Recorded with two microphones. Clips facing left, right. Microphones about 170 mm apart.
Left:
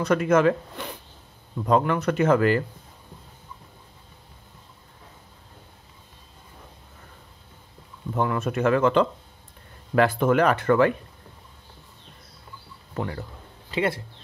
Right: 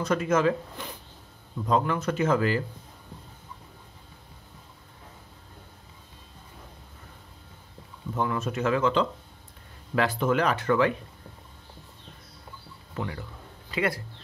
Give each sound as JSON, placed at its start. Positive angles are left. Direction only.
{"t": 0.0, "sound": "speech", "side_deg": 60}
{"t": 8.1, "sound": "speech", "side_deg": 60}
{"t": 12.9, "sound": "speech", "side_deg": 45}
{"t": 13.7, "sound": "speech", "side_deg": 25}